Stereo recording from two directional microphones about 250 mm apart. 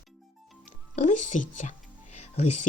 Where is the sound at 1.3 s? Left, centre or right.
Left.